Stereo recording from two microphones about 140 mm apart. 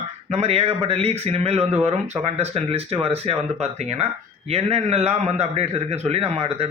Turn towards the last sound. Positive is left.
turn(degrees=-45)  # may be behind; listen again after turning